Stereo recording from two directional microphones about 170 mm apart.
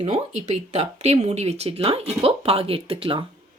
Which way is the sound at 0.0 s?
40° right (ahead or behind).